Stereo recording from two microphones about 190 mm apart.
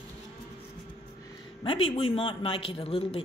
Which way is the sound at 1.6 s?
30° left (ahead or behind).